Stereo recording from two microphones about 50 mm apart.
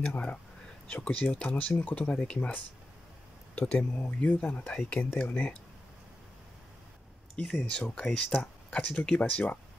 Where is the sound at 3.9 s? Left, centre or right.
Left.